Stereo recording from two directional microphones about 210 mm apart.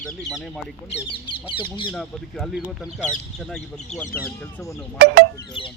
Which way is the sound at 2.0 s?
Centre (ahead or behind).